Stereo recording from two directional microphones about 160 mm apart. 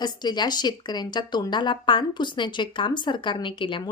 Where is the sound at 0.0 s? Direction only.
25° left (ahead or behind).